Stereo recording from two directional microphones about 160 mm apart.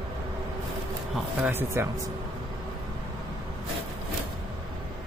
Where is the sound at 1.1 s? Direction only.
10° right (ahead or behind).